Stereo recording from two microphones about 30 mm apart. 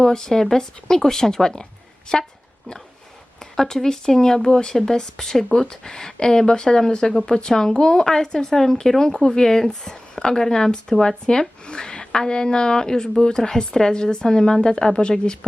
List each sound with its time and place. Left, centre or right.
0.0 s speech: centre
3.5 s speech: centre